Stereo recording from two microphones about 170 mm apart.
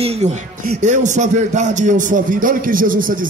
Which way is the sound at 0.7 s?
45° right (ahead or behind).